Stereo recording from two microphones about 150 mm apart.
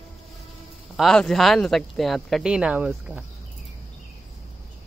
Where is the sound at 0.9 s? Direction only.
Centre (ahead or behind).